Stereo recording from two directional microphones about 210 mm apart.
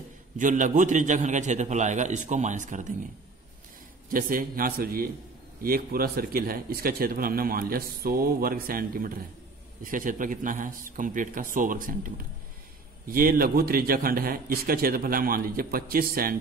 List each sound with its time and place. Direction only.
0.4 s a man's voice: 40° right (ahead or behind)
4.1 s a man's voice: 40° right (ahead or behind)